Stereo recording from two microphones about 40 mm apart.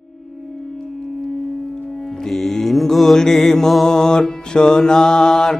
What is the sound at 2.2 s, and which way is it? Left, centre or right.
Mantra, centre.